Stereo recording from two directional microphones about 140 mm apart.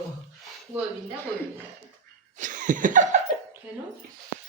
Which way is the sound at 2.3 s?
65° right (ahead or behind).